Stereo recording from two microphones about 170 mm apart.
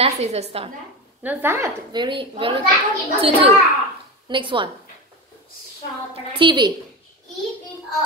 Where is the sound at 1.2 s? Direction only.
10° right (ahead or behind).